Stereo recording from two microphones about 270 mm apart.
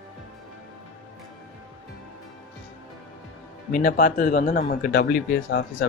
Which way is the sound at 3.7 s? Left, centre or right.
Left.